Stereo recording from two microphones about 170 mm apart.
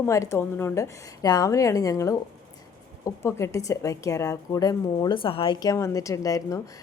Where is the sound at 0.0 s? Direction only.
20° left (ahead or behind).